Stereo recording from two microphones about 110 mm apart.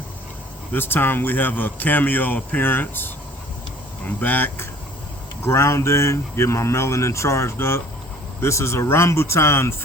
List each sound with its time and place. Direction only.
0.7 s speech: 20° left (ahead or behind)
4.2 s speech: 15° left (ahead or behind)